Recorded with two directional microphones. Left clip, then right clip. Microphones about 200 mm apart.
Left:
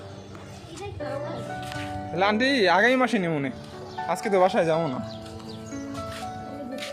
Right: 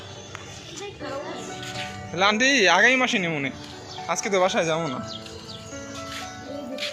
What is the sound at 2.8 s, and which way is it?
Speech, 30° left (ahead or behind).